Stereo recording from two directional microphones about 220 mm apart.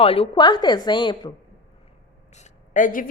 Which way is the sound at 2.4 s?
35° left (ahead or behind).